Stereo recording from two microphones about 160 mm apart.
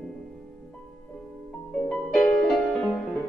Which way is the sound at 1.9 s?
Centre (ahead or behind).